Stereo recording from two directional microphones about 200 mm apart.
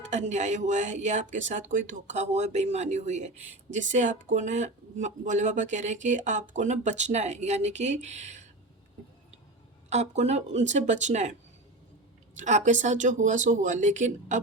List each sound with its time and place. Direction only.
0.0 s speech: 35° right (ahead or behind)
9.9 s speech: 35° right (ahead or behind)
12.4 s speech: 35° right (ahead or behind)